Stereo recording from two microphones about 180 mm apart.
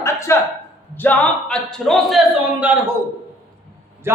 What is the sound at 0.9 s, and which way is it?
A man's voice, 10° left (ahead or behind).